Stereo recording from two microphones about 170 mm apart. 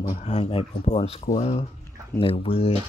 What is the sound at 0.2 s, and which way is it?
Speech, 35° left (ahead or behind).